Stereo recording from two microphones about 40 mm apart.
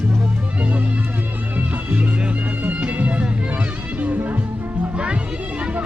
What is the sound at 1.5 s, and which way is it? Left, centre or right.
Music, right.